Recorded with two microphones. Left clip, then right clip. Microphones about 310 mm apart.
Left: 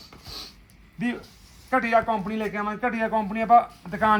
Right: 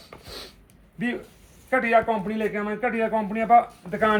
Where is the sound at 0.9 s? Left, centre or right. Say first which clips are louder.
Right 1 dB; centre.